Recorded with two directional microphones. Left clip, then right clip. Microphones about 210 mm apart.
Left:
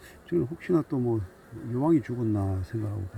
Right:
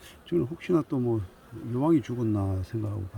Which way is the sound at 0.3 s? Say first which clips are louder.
Even; 15° right (ahead or behind).